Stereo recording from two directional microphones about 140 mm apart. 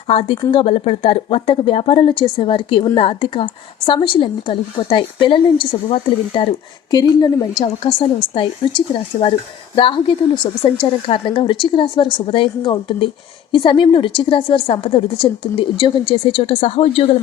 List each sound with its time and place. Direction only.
0.1 s a woman's voice: 45° left (ahead or behind)
7.1 s a woman's voice: 30° left (ahead or behind); by 17.2 s 45° left (ahead or behind)